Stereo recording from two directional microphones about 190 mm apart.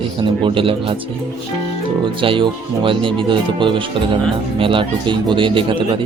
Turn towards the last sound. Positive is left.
turn(degrees=-25)  # may be behind; listen again after turning